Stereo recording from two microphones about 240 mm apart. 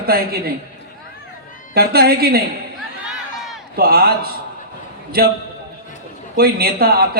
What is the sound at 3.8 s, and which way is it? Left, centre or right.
A man's voice, right.